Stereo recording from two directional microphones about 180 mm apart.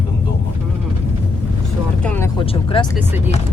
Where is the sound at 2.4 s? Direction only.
25° left (ahead or behind).